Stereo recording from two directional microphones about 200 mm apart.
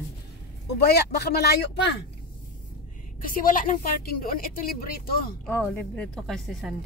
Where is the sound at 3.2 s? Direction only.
45° left (ahead or behind).